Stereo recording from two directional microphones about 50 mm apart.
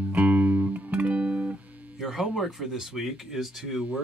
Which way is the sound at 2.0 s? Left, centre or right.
Centre.